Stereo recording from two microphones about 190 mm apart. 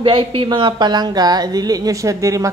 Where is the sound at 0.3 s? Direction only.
25° right (ahead or behind).